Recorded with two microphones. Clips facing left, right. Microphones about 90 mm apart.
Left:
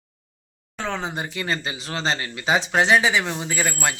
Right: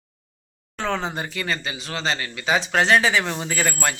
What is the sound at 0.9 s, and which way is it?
Speech, 15° left (ahead or behind).